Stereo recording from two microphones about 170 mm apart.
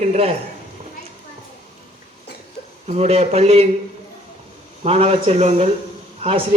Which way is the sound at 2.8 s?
40° right (ahead or behind).